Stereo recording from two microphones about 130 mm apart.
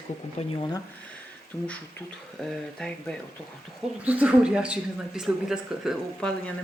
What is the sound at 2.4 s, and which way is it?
Speech, 5° left (ahead or behind).